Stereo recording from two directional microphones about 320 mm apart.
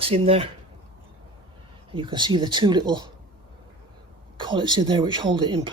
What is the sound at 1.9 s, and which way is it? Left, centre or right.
Speech, centre.